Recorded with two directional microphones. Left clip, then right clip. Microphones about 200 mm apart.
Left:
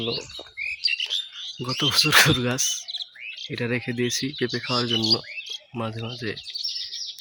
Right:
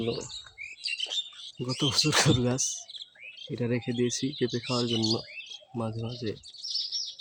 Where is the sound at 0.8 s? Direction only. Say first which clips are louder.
Left 6 dB; 65° right (ahead or behind).